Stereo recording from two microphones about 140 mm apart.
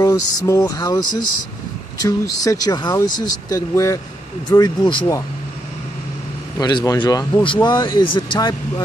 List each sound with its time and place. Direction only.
0.0 s speech: 25° left (ahead or behind)
2.0 s speech: 25° left (ahead or behind)
6.6 s speech: 25° left (ahead or behind)